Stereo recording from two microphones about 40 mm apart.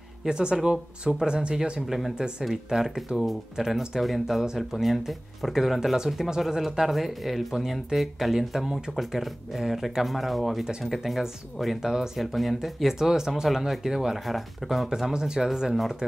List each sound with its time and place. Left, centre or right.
0.2 s speech: centre
1.9 s speech: centre
11.8 s speech: centre
12.2 s speech: centre
14.9 s speech: centre